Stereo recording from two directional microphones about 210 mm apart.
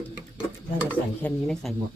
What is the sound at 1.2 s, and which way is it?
Speech, 5° left (ahead or behind).